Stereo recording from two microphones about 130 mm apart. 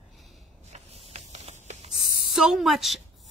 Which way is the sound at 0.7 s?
55° right (ahead or behind).